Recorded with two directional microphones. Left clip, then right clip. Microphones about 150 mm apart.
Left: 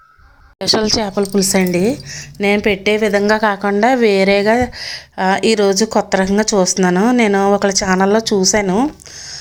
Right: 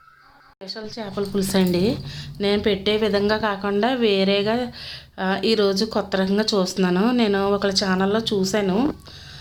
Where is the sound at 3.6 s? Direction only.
40° left (ahead or behind).